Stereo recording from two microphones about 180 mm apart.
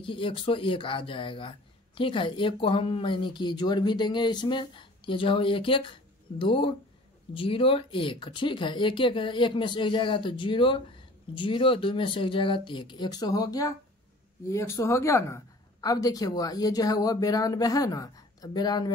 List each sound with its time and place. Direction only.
0.0 s speech: 30° left (ahead or behind)